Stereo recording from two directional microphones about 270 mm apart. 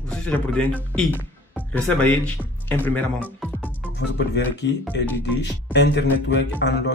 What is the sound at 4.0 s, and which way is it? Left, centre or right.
Speech, left.